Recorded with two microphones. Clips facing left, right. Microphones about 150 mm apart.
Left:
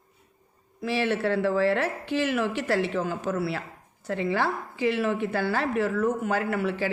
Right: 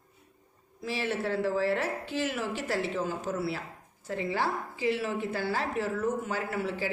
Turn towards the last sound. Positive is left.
turn(degrees=65)  # may be behind; listen again after turning